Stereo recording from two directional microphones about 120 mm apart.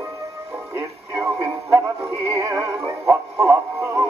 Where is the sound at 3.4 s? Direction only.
25° right (ahead or behind).